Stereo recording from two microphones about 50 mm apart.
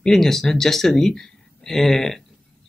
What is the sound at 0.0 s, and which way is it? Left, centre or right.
Speech, centre.